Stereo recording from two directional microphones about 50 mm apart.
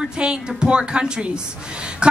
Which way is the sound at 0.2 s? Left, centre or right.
Centre.